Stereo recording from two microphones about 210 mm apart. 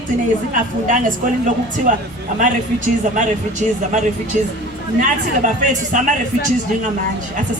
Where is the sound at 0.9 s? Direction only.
40° right (ahead or behind).